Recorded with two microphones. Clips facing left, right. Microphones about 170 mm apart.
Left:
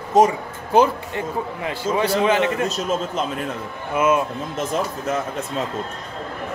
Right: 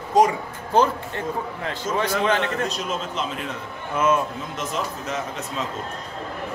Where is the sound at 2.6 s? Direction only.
45° left (ahead or behind).